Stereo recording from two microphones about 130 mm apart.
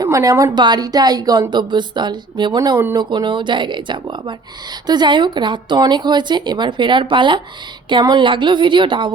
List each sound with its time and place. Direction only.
0.0 s a woman's voice: 25° right (ahead or behind)